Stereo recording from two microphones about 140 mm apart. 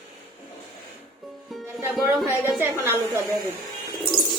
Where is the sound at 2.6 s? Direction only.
15° right (ahead or behind).